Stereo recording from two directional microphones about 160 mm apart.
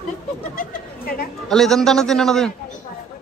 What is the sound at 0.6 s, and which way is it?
Bird, 65° left (ahead or behind).